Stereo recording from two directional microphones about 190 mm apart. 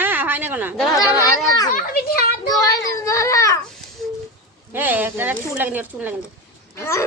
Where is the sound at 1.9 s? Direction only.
50° left (ahead or behind).